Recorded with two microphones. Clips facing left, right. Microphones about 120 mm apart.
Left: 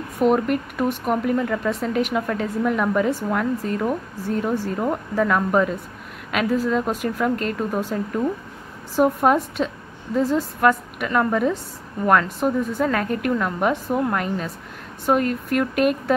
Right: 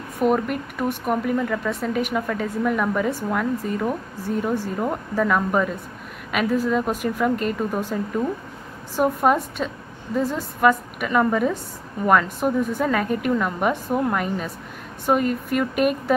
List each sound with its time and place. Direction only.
0.2 s a woman's voice: centre (ahead or behind)